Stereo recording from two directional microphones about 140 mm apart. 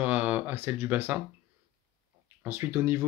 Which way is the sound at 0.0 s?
10° right (ahead or behind).